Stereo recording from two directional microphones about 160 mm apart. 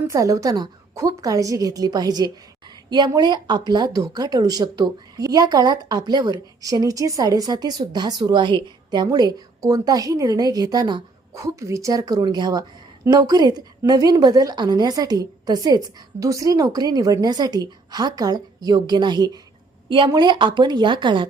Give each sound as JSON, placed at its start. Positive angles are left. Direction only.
{"t": 0.1, "sound": "a woman's voice", "side_deg": -20}